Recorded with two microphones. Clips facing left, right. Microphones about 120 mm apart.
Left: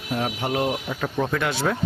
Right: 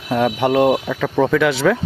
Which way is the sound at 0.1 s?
80° right.